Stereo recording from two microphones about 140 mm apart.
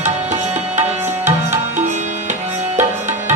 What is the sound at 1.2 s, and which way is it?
Music, 60° right (ahead or behind).